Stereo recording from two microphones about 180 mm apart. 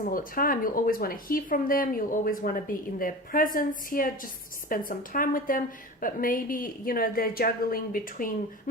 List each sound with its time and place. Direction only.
0.0 s speech: 50° left (ahead or behind)